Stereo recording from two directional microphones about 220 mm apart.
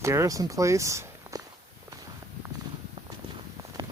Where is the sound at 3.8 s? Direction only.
20° right (ahead or behind).